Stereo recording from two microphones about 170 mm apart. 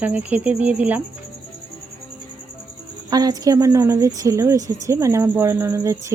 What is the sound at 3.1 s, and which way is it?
Speech, 20° right (ahead or behind).